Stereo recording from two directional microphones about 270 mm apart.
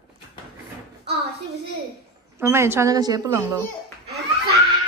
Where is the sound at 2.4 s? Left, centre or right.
Centre.